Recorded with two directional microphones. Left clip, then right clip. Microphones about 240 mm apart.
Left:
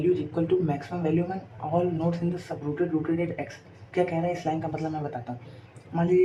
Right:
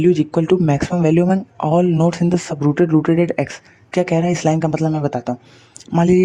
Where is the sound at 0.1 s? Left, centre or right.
Right.